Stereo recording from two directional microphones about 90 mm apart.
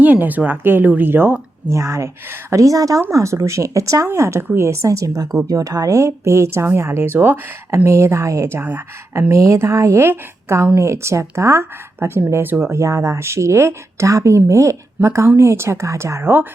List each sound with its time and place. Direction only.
0.0 s speech: 20° right (ahead or behind)
7.9 s speech: 35° right (ahead or behind)
8.6 s speech: 20° right (ahead or behind)